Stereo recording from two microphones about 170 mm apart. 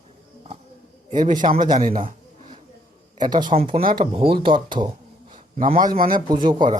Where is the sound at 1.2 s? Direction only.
50° right (ahead or behind).